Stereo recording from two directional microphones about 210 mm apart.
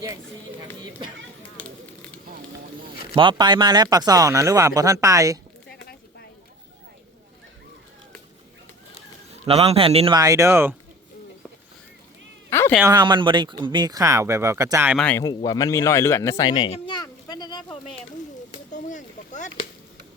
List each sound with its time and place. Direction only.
0.8 s speech: 20° right (ahead or behind)
2.9 s a sound: 50° left (ahead or behind)
3.2 s speech: 20° right (ahead or behind)
5.6 s a sound: 50° left (ahead or behind)
9.0 s speech: 30° right (ahead or behind); by 10.8 s 10° right (ahead or behind)
12.5 s cat: 10° left (ahead or behind)
12.8 s speech: 20° right (ahead or behind)
14.9 s speech: 5° left (ahead or behind)
15.2 s speech: 20° left (ahead or behind)
18.5 s a sound: 35° left (ahead or behind)